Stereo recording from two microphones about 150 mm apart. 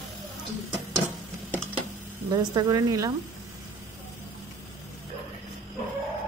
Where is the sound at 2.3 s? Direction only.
25° right (ahead or behind).